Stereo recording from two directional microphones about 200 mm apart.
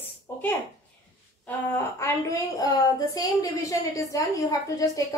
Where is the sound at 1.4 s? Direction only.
10° left (ahead or behind).